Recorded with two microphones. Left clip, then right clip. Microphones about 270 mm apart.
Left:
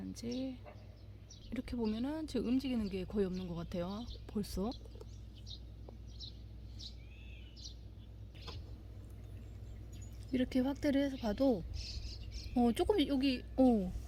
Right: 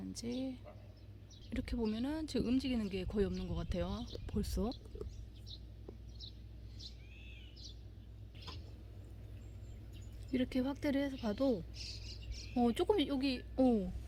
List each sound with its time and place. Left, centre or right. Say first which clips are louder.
0.0 s speech: even; centre
10.3 s a woman's voice: left 2 dB; centre
11.7 s cricket: even; right
12.5 s a woman's voice: left 1 dB; centre